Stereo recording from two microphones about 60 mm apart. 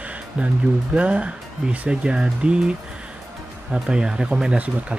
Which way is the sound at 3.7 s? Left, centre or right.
Centre.